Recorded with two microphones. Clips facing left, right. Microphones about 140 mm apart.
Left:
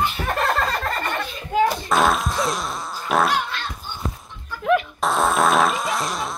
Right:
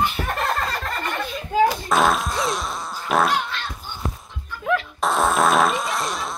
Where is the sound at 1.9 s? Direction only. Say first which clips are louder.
Even; centre (ahead or behind).